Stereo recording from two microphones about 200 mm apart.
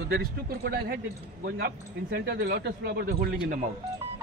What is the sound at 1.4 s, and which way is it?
Speech, 50° right (ahead or behind).